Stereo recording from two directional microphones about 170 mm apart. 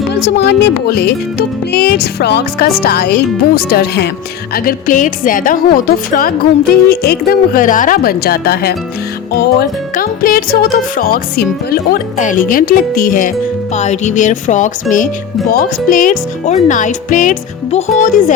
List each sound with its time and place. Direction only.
0.1 s speech: 90° left; by 4.1 s 70° left (ahead or behind)
4.5 s a woman's voice: 55° left (ahead or behind)
13.7 s speech: 40° left (ahead or behind)